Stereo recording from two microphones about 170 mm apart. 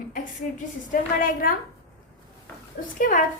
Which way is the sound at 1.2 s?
55° left (ahead or behind).